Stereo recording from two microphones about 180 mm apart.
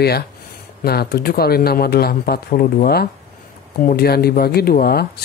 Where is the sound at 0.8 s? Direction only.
60° left (ahead or behind).